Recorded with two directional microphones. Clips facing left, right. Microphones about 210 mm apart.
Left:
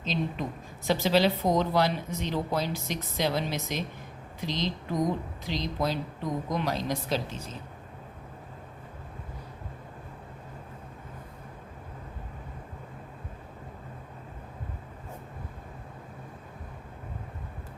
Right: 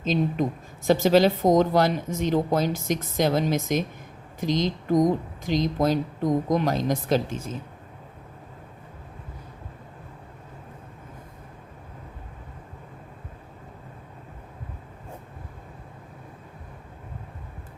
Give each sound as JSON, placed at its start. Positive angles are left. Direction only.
{"t": 0.0, "sound": "speech", "side_deg": -50}